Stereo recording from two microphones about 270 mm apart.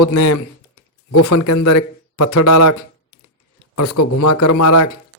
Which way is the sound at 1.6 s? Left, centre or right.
Left.